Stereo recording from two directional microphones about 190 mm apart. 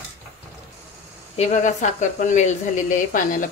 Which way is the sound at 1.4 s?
40° left (ahead or behind).